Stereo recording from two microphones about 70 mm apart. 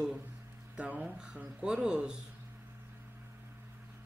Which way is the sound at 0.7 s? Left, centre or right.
Centre.